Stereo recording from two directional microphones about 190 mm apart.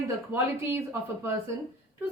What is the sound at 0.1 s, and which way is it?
A woman's voice, 15° right (ahead or behind).